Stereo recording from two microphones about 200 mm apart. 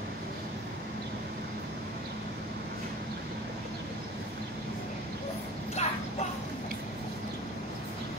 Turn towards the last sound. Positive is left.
turn(degrees=35)  # may be behind; listen again after turning